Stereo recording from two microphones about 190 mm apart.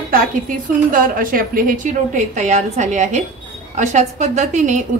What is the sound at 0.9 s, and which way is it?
A woman's voice, 45° right (ahead or behind).